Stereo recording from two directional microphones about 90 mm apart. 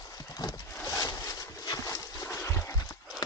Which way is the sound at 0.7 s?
30° left (ahead or behind).